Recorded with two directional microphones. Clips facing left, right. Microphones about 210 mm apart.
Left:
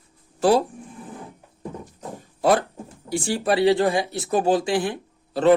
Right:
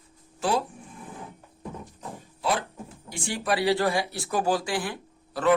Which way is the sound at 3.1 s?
30° left (ahead or behind).